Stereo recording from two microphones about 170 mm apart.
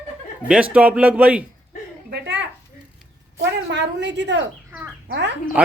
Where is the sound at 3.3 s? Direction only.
90° right.